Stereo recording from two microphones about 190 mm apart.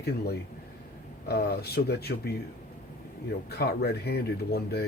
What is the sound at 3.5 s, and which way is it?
Speech, 55° left (ahead or behind).